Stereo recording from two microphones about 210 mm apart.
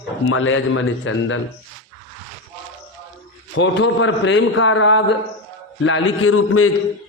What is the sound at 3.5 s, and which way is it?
A man's voice, 60° left (ahead or behind).